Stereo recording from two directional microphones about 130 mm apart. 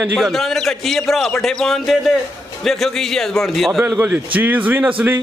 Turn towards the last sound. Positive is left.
turn(degrees=-10)  # may be behind; listen again after turning